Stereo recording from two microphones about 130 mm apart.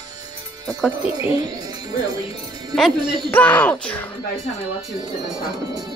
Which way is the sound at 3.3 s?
15° left (ahead or behind).